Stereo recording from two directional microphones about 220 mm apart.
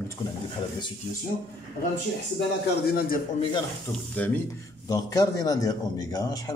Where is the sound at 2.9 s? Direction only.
40° left (ahead or behind).